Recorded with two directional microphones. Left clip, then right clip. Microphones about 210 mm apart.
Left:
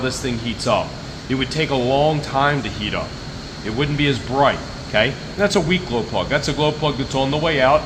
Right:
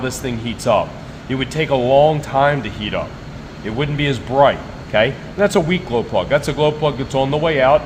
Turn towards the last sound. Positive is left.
turn(degrees=-45)  # may be behind; listen again after turning